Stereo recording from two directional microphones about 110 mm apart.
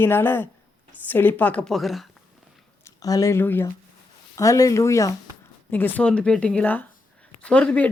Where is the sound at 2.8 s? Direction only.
30° left (ahead or behind).